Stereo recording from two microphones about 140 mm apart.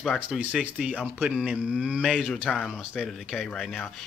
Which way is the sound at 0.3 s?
10° right (ahead or behind).